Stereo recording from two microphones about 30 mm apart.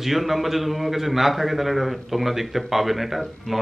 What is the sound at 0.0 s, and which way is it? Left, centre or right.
A man's voice, centre.